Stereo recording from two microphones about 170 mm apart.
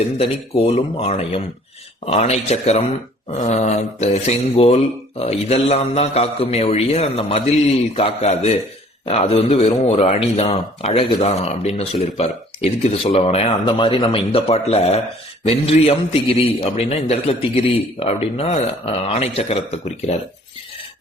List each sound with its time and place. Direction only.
0.2 s a man's voice: 35° left (ahead or behind)